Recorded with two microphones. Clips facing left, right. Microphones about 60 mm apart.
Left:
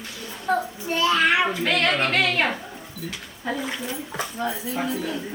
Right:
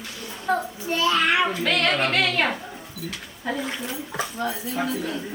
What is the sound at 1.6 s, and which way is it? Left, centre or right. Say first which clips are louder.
Speech: even; left.